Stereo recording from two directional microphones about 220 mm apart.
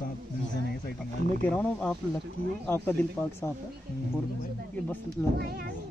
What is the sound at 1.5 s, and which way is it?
A man's voice, 5° left (ahead or behind).